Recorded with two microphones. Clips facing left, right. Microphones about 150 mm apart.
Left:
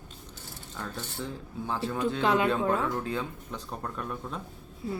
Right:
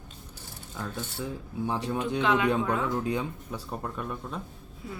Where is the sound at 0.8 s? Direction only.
10° right (ahead or behind).